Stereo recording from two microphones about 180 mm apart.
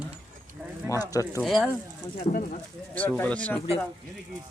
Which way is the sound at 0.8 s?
20° left (ahead or behind).